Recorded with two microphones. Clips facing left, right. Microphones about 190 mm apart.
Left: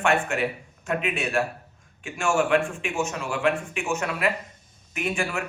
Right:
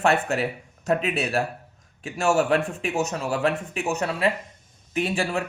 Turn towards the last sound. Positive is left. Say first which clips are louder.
# right 3 dB
turn(degrees=-35)  # may be behind; listen again after turning